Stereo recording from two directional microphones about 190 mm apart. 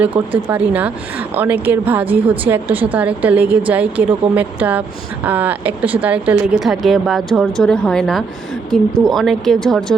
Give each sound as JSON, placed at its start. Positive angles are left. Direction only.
{"t": 0.1, "sound": "speech", "side_deg": -25}
{"t": 0.5, "sound": "a woman's voice", "side_deg": -10}